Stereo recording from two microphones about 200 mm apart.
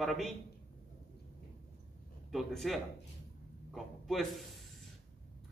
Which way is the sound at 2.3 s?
Centre (ahead or behind).